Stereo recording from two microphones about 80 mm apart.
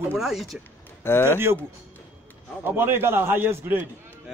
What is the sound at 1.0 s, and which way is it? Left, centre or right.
Speech, left.